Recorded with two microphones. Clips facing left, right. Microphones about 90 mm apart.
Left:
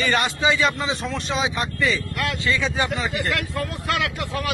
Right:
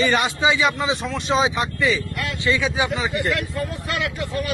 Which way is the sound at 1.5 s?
20° right (ahead or behind).